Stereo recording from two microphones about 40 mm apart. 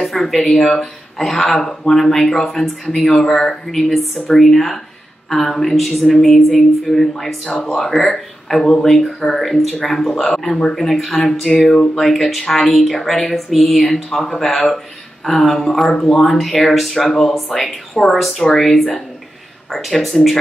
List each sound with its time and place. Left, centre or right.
0.0 s speech: centre
2.4 s speech: centre